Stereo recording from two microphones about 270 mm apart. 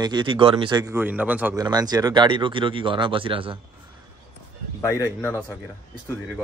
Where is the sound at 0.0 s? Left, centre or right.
Centre.